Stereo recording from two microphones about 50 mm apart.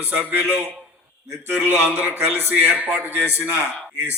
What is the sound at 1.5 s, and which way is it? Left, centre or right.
Speech, right.